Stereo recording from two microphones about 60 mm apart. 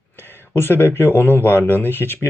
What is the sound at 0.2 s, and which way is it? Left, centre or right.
Speech, left.